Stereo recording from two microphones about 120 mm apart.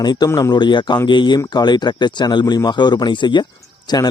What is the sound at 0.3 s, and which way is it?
Speech, 35° left (ahead or behind).